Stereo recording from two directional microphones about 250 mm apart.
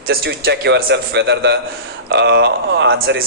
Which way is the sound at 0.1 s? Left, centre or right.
Right.